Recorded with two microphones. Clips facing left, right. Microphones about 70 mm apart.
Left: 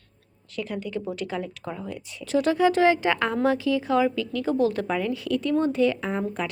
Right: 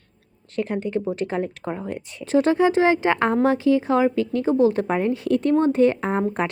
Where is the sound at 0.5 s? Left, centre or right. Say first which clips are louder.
Right 6 dB; right.